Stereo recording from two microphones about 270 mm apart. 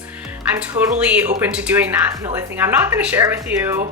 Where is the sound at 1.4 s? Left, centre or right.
Centre.